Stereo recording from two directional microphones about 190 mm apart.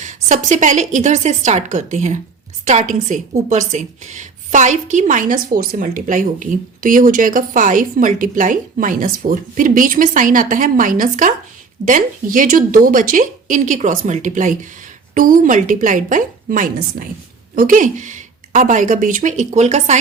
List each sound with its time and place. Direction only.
0.0 s a woman's voice: 40° right (ahead or behind)